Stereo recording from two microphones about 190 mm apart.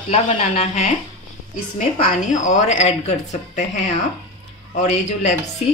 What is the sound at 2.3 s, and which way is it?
A woman's voice, 40° left (ahead or behind).